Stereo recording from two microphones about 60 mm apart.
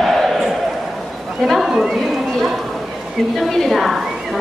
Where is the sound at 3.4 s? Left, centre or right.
Centre.